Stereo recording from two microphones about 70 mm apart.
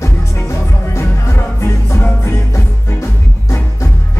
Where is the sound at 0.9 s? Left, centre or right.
Left.